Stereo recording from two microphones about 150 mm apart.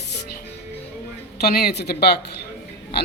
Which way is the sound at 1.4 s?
90° left.